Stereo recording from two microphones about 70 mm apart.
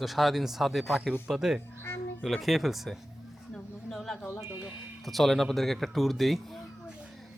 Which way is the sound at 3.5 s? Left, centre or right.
Centre.